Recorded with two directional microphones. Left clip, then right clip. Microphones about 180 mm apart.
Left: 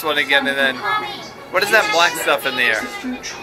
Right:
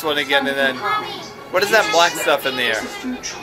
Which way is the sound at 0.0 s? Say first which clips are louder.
Left 2 dB; 20° right (ahead or behind).